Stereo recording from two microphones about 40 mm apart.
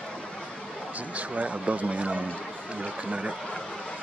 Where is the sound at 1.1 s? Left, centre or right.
Right.